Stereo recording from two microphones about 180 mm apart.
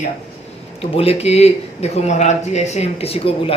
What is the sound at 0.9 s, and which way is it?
A man's voice, 35° left (ahead or behind).